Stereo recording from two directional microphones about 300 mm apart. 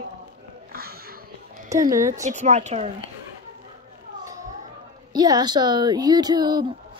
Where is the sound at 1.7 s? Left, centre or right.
Centre.